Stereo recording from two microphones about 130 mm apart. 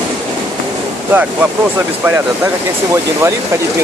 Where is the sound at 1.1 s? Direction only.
15° right (ahead or behind).